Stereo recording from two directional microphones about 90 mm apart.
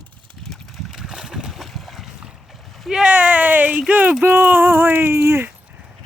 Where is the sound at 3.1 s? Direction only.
15° right (ahead or behind).